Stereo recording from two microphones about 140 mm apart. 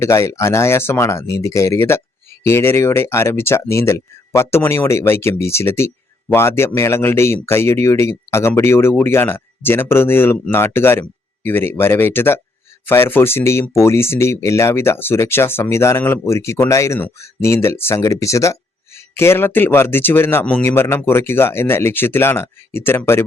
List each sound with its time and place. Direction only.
0.0 s speech: 20° left (ahead or behind)